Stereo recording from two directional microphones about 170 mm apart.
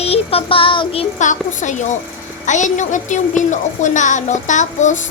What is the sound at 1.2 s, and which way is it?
A woman's voice, 50° left (ahead or behind).